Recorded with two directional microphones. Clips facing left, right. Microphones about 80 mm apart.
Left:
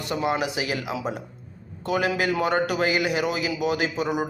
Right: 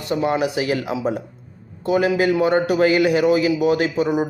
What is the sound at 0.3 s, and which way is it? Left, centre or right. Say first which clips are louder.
A man's voice: right 6 dB; right.